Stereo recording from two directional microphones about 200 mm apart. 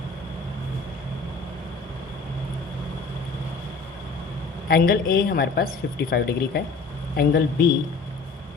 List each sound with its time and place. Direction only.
4.7 s speech: 45° left (ahead or behind)